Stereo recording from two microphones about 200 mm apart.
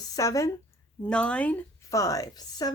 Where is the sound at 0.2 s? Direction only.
15° left (ahead or behind).